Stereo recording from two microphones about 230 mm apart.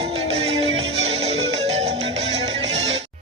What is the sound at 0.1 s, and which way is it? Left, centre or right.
Music, right.